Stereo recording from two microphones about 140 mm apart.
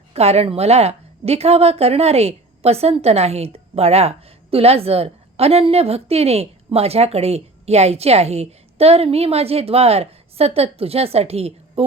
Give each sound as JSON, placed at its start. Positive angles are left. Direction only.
{"t": 0.1, "sound": "a woman's voice", "side_deg": -50}